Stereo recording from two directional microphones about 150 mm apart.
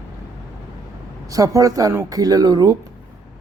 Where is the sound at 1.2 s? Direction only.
25° right (ahead or behind).